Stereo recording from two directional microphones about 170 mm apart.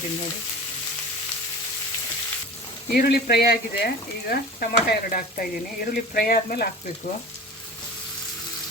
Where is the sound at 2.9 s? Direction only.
70° left (ahead or behind).